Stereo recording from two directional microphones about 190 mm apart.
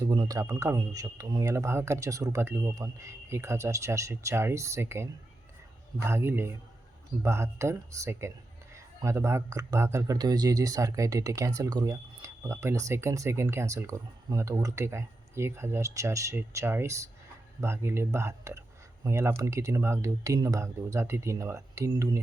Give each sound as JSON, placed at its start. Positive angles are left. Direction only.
{"t": 0.0, "sound": "speech", "side_deg": -20}